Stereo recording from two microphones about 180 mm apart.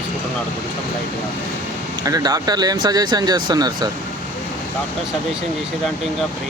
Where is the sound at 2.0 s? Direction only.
20° right (ahead or behind).